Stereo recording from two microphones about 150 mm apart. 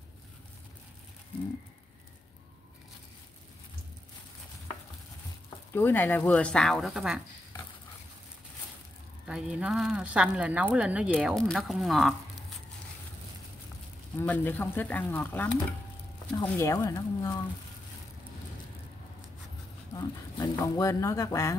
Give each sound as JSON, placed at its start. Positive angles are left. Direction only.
{"t": 5.7, "sound": "speech", "side_deg": 15}
{"t": 9.2, "sound": "speech", "side_deg": -5}
{"t": 14.2, "sound": "speech", "side_deg": 10}
{"t": 20.0, "sound": "speech", "side_deg": 25}